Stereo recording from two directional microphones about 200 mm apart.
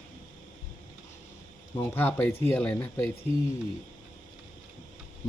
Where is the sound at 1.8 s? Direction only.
10° left (ahead or behind).